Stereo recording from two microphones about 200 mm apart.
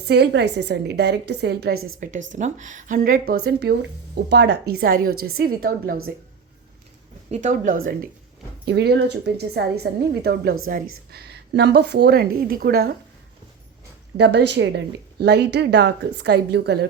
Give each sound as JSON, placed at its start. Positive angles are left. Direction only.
{"t": 0.1, "sound": "a woman's voice", "side_deg": -55}
{"t": 1.7, "sound": "a woman's voice", "side_deg": -90}
{"t": 2.0, "sound": "a woman's voice", "side_deg": -40}
{"t": 7.3, "sound": "a woman's voice", "side_deg": -40}
{"t": 8.6, "sound": "a woman's voice", "side_deg": -55}
{"t": 14.2, "sound": "a woman's voice", "side_deg": -60}